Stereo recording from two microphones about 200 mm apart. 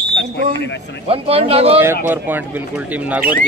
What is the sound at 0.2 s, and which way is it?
Speech, 60° left (ahead or behind).